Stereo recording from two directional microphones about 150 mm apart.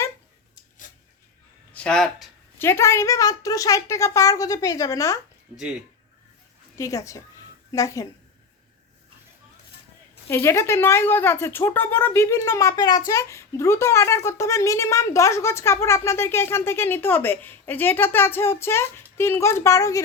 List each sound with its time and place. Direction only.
1.7 s speech: 5° left (ahead or behind)
2.6 s a woman's voice: 15° left (ahead or behind)
6.7 s a woman's voice: 20° left (ahead or behind)
10.2 s speech: 15° left (ahead or behind)